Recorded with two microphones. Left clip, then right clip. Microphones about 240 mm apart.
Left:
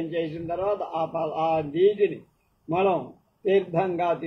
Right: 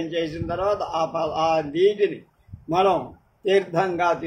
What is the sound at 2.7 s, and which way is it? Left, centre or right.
A man's voice, right.